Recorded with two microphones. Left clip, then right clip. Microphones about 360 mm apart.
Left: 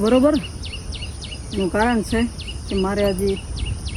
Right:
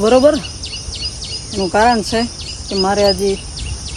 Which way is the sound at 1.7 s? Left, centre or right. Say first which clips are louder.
Right 8 dB; centre.